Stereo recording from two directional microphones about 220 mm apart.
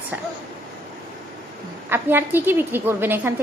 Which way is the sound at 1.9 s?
10° right (ahead or behind).